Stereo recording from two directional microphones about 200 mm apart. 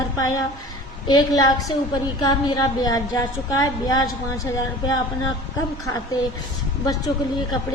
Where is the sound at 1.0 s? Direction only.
20° left (ahead or behind).